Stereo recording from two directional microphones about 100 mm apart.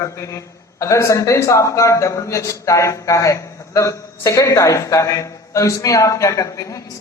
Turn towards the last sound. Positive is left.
turn(degrees=35)  # may be behind; listen again after turning